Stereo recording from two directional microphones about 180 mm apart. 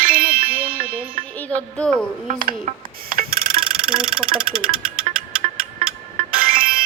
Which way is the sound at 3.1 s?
55° right (ahead or behind).